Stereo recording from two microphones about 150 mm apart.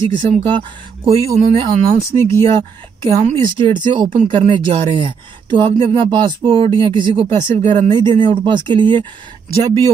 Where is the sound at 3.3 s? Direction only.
30° right (ahead or behind).